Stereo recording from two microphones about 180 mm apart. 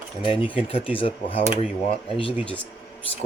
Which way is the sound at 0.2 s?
30° left (ahead or behind).